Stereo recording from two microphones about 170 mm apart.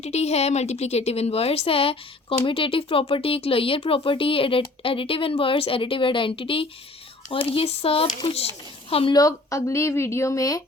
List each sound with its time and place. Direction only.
0.0 s speech: 40° left (ahead or behind)
9.1 s speech: 20° left (ahead or behind)